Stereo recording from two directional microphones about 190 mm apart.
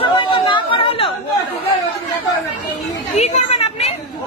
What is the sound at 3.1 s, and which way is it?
Children playing, 35° left (ahead or behind).